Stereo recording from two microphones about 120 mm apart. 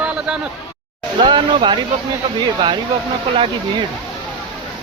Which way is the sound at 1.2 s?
40° right (ahead or behind).